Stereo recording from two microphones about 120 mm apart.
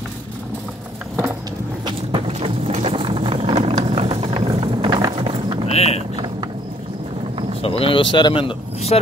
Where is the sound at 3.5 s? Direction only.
60° right (ahead or behind).